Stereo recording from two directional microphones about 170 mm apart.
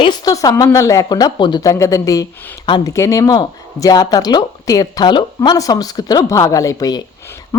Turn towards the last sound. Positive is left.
turn(degrees=20)  # may be behind; listen again after turning